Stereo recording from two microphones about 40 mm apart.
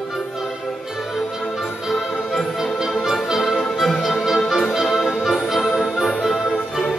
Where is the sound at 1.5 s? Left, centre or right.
Centre.